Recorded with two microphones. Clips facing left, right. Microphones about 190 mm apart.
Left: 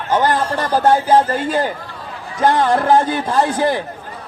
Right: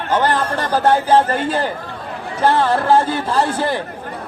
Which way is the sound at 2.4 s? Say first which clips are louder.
Left 1 dB; 15° left (ahead or behind).